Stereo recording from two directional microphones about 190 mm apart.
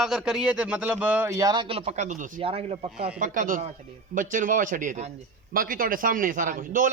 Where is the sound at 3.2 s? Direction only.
45° right (ahead or behind).